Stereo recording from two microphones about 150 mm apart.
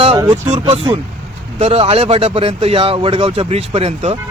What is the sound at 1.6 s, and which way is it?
Speech, 40° right (ahead or behind).